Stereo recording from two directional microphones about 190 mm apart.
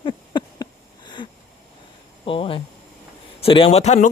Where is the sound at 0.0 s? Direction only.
25° left (ahead or behind).